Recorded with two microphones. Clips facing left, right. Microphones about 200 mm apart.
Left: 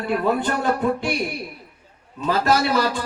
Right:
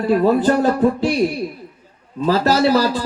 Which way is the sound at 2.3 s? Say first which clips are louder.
Right 5 dB; 35° right (ahead or behind).